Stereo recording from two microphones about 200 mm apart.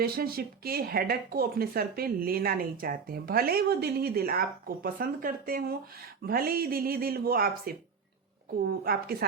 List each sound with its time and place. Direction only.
0.0 s speech: 50° right (ahead or behind)
8.8 s speech: 50° right (ahead or behind)